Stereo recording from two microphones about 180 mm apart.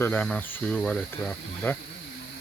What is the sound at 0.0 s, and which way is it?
Speech, 10° left (ahead or behind).